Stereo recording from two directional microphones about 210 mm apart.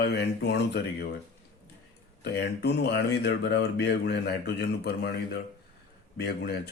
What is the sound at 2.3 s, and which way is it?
A man's voice, 50° left (ahead or behind).